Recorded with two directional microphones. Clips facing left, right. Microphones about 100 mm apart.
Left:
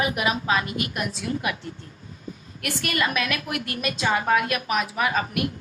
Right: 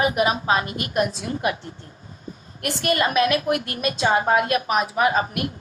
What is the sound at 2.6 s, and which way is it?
A woman's voice, 35° right (ahead or behind).